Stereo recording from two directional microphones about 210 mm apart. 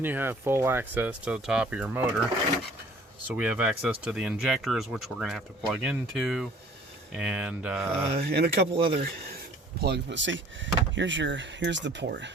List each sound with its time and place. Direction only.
0.0 s speech: 10° right (ahead or behind)
3.2 s speech: 5° right (ahead or behind)
8.1 s speech: 45° right (ahead or behind)
9.8 s speech: 55° right (ahead or behind)